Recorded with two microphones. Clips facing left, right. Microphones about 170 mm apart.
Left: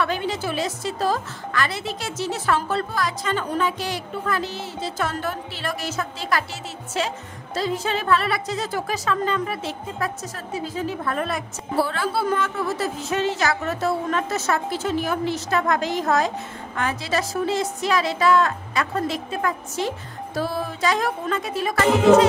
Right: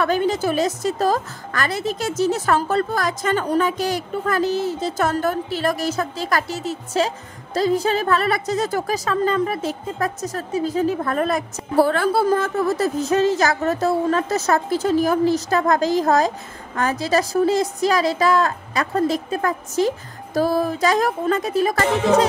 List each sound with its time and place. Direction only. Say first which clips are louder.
0.0 s a woman's voice: right 5 dB; 45° right (ahead or behind)